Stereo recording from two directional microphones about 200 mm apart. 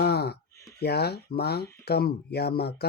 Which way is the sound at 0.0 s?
55° left (ahead or behind).